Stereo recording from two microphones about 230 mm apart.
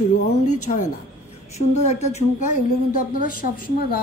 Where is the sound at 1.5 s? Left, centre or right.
Left.